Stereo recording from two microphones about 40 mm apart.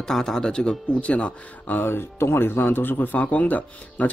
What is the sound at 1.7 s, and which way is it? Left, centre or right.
Speech, left.